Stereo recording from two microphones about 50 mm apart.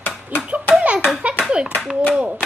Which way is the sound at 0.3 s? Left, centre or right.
Right.